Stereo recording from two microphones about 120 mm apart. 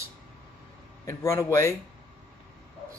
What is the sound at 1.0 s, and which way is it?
Speech, 25° left (ahead or behind).